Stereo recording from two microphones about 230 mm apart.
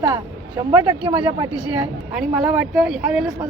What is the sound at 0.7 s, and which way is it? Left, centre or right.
Speech, centre.